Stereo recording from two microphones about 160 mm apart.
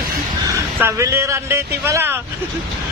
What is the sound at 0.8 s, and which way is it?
Speech, 15° right (ahead or behind).